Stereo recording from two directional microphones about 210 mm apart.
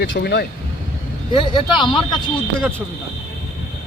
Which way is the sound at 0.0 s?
50° left (ahead or behind).